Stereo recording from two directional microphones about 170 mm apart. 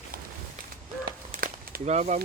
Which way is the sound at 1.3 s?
50° right (ahead or behind).